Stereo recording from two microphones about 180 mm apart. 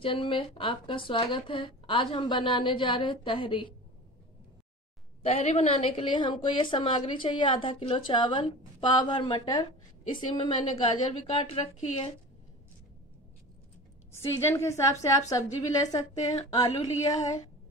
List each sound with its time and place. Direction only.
0.0 s a woman's voice: 30° left (ahead or behind)
5.2 s a woman's voice: 35° left (ahead or behind)
14.1 s a woman's voice: 15° left (ahead or behind)